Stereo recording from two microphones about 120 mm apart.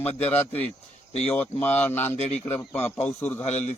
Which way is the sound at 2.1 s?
65° left (ahead or behind).